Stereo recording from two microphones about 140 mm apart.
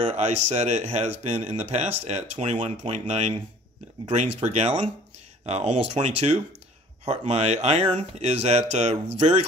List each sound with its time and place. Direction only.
0.0 s speech: 55° right (ahead or behind)
4.5 s speech: 55° right (ahead or behind)